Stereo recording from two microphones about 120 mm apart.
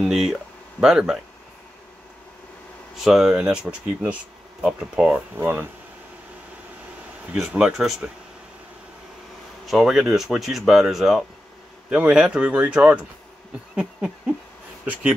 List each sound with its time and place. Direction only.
0.0 s speech: 5° right (ahead or behind)
3.0 s speech: 5° right (ahead or behind)
7.3 s speech: 5° right (ahead or behind)
9.7 s speech: 5° right (ahead or behind)
13.7 s a sound: 10° right (ahead or behind)